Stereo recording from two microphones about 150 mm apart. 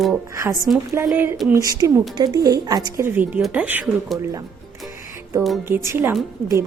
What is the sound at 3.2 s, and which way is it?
Speech, 10° right (ahead or behind).